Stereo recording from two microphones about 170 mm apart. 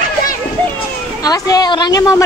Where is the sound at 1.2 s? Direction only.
20° left (ahead or behind).